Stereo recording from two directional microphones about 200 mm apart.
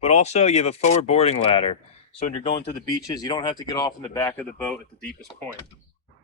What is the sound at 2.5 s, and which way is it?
Speech, 20° left (ahead or behind).